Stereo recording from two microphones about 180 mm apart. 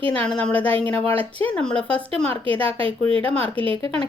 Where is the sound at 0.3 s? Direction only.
5° left (ahead or behind).